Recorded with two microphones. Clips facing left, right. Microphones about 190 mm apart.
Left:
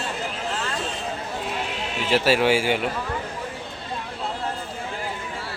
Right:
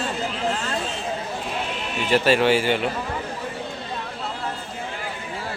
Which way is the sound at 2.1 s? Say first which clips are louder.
Right 1 dB; 5° left (ahead or behind).